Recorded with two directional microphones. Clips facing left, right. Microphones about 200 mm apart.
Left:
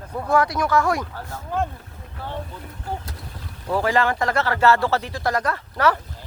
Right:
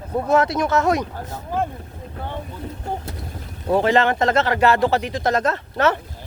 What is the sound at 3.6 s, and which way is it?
Speech, 25° right (ahead or behind).